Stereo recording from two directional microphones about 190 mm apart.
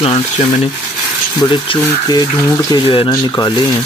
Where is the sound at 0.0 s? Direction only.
30° left (ahead or behind).